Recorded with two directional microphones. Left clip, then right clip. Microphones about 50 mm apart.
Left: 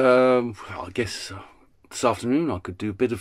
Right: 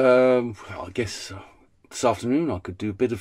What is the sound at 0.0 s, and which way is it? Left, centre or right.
Speech, left.